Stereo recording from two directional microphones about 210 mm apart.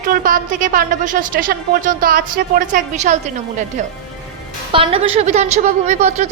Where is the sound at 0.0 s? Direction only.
40° right (ahead or behind).